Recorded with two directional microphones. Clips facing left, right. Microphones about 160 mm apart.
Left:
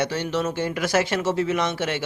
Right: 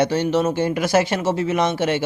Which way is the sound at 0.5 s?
20° right (ahead or behind).